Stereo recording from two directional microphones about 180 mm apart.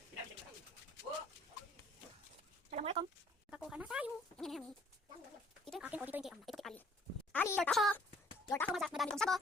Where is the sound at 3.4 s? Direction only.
5° right (ahead or behind).